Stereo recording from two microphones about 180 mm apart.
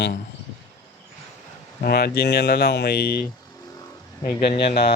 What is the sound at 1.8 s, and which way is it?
Speech, 60° left (ahead or behind).